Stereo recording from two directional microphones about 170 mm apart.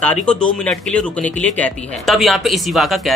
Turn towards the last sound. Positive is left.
turn(degrees=0)  # may be behind; listen again after turning